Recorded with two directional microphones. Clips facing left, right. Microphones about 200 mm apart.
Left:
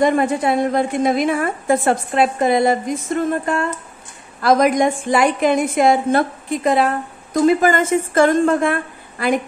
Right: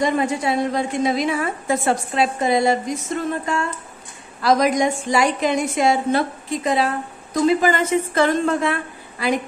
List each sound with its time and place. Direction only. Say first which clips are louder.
0.0 s a woman's voice: left 4 dB; 55° left (ahead or behind)